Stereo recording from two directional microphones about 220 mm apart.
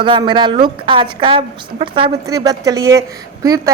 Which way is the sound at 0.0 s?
20° right (ahead or behind).